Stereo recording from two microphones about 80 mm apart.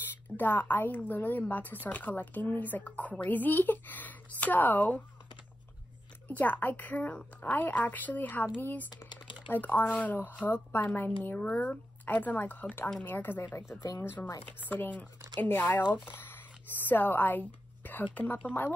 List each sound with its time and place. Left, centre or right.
0.4 s speech: left
6.2 s speech: left
9.1 s typing: left
9.5 s speech: left